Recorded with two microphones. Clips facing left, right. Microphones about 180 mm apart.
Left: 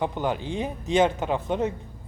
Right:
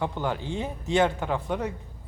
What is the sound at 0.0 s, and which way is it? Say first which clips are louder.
Speech: left 2 dB; 15° left (ahead or behind).